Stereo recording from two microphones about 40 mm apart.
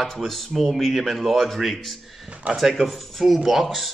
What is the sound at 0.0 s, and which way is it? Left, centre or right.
Speech, centre.